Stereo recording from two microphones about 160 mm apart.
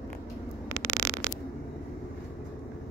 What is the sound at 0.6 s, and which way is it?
Static, 15° right (ahead or behind).